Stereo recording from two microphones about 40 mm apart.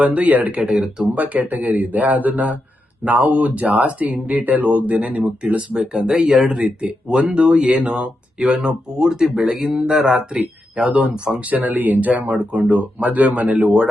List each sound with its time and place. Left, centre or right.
0.0 s speech: right
0.5 s speech: right
1.0 s speech: right
5.9 s speech: centre
7.1 s speech: right
10.3 s speech: right